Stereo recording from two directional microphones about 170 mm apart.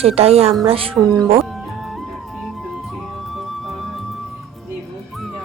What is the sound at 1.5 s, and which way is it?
Music, centre (ahead or behind).